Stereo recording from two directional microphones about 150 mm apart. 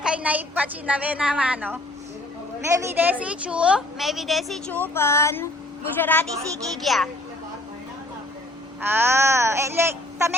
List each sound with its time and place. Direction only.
0.0 s a woman's voice: 5° right (ahead or behind)
4.7 s a sound: 15° left (ahead or behind)
6.8 s a woman's voice: centre (ahead or behind)
8.8 s a woman's voice: 15° right (ahead or behind)